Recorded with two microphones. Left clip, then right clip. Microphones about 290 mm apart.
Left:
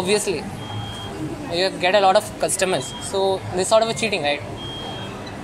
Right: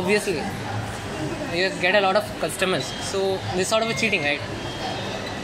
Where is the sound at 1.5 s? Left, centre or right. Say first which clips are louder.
Left 2 dB; left.